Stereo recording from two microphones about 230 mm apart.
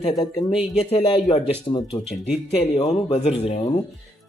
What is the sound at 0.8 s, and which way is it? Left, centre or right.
Speech, left.